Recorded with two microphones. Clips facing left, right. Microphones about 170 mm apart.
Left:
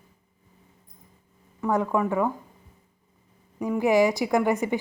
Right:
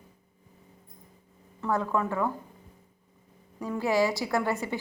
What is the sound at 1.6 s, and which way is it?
Speech, 15° left (ahead or behind).